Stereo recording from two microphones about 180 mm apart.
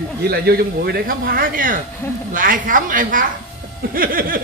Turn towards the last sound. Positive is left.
turn(degrees=-55)  # may be behind; listen again after turning